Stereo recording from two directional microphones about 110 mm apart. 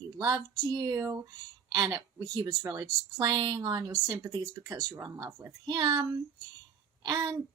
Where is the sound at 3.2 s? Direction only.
45° right (ahead or behind).